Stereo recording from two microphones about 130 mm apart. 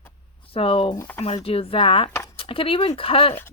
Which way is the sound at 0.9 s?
15° left (ahead or behind).